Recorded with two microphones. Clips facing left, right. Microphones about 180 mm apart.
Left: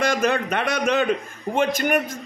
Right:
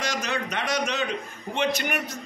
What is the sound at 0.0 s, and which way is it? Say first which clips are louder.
A man's voice: left 8 dB; 55° left (ahead or behind).